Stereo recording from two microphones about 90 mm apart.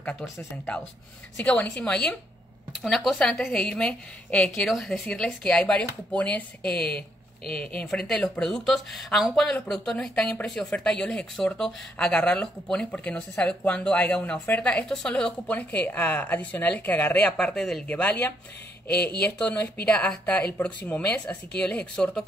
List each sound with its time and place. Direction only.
1.3 s speech: 15° left (ahead or behind)
17.4 s speech: 5° left (ahead or behind)
17.8 s speech: 15° left (ahead or behind)